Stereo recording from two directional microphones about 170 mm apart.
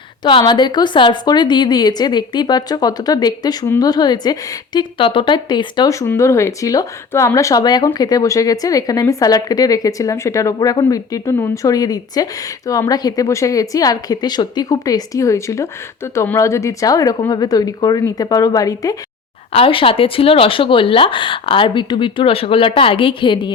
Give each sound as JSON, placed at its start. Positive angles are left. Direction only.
{"t": 0.3, "sound": "speech", "side_deg": 30}
{"t": 19.5, "sound": "speech", "side_deg": 35}